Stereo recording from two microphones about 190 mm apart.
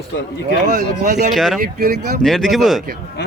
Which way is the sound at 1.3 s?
Centre (ahead or behind).